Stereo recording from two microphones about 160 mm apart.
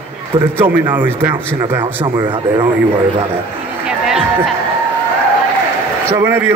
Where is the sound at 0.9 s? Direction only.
10° right (ahead or behind).